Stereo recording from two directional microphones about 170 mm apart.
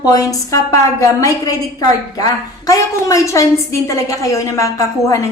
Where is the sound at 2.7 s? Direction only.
20° left (ahead or behind).